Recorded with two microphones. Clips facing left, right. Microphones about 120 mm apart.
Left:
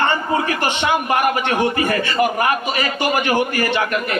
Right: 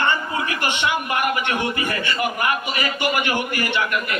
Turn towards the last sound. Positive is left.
turn(degrees=40)  # may be behind; listen again after turning